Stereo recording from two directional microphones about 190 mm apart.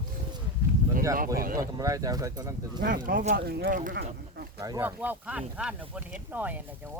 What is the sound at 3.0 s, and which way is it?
Speech, 50° right (ahead or behind).